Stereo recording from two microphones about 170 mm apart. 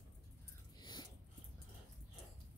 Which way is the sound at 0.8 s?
25° left (ahead or behind).